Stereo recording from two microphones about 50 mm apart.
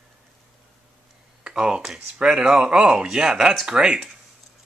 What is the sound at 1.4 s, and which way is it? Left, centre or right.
Speech, centre.